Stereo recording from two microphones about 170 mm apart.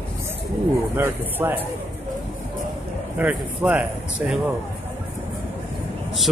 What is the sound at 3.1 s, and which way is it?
Speech, 10° right (ahead or behind).